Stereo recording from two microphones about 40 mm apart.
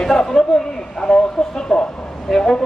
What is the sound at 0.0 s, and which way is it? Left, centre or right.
Speech, centre.